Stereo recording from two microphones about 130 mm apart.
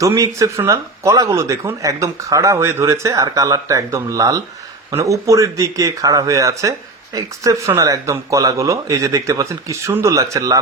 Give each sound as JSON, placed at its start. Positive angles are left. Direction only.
{"t": 0.0, "sound": "speech", "side_deg": -25}